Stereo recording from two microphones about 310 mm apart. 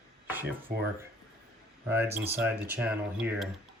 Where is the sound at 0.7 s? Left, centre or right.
Right.